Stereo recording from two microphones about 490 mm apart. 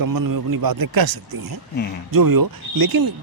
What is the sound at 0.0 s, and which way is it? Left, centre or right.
Speech, right.